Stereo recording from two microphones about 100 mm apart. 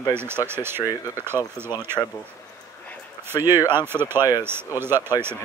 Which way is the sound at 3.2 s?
20° right (ahead or behind).